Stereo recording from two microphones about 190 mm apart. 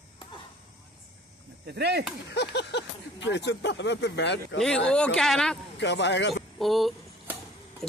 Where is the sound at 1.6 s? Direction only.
60° right (ahead or behind).